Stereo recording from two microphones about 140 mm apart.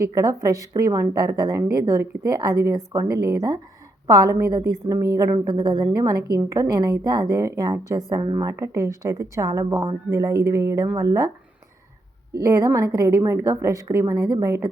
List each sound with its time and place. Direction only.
0.0 s a woman's voice: 20° right (ahead or behind)
12.3 s a woman's voice: 20° right (ahead or behind)